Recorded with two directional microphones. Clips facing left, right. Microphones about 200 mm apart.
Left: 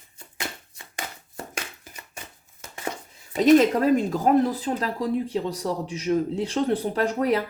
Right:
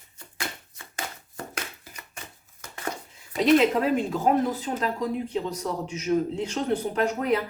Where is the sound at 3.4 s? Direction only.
40° left (ahead or behind).